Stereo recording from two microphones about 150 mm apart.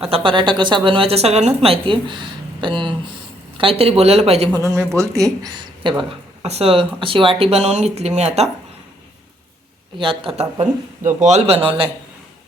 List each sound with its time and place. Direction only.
0.0 s a woman's voice: 40° right (ahead or behind)
4.5 s speech: 20° right (ahead or behind)
6.0 s speech: 40° right (ahead or behind)
10.0 s a woman's voice: 35° right (ahead or behind)
10.3 s speech: 50° right (ahead or behind)